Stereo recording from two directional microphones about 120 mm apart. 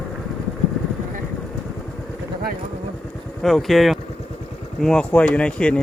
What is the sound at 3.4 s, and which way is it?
Speech, centre (ahead or behind).